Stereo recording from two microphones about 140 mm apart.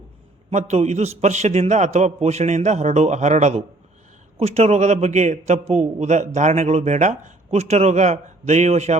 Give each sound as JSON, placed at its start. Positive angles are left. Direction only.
{"t": 0.5, "sound": "a man's voice", "side_deg": -55}